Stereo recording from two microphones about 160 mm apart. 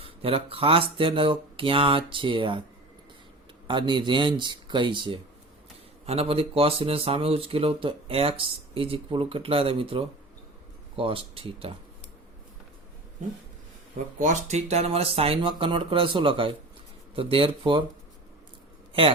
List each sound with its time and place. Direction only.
0.0 s speech: 35° right (ahead or behind)
3.7 s speech: 30° right (ahead or behind)
14.2 s speech: 50° right (ahead or behind); by 17.8 s 30° right (ahead or behind)